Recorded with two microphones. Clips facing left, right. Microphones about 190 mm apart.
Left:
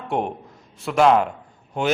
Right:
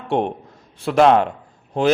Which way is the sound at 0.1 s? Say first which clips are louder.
Right 4 dB; 25° right (ahead or behind).